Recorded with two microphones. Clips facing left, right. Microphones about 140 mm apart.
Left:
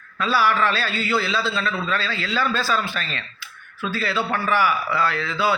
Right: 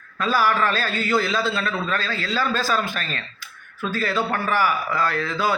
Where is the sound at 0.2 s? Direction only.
45° right (ahead or behind).